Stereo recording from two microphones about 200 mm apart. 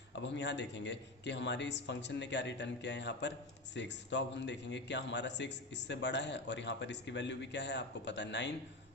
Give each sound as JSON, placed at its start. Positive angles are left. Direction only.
{"t": 0.2, "sound": "a man's voice", "side_deg": 60}